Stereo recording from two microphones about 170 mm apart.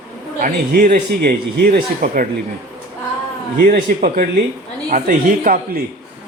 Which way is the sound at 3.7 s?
55° right (ahead or behind).